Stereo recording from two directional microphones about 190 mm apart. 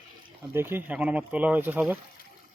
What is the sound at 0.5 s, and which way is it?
Speech, 10° right (ahead or behind).